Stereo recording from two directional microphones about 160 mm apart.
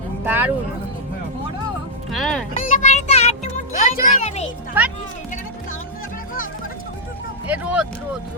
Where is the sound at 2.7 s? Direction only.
45° left (ahead or behind).